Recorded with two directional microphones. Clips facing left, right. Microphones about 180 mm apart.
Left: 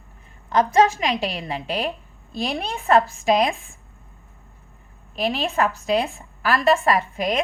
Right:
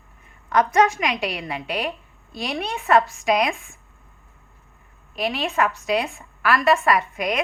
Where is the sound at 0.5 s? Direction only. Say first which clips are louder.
Left 1 dB; 30° left (ahead or behind).